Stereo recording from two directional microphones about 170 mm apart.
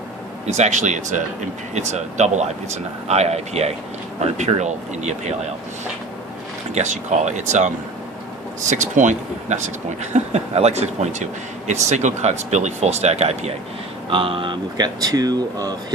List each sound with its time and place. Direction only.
0.5 s speech: 45° right (ahead or behind)
6.7 s speech: 45° right (ahead or behind); by 15.7 s 25° right (ahead or behind)